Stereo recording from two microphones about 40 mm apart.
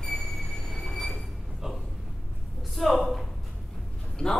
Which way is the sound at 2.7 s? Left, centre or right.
Centre.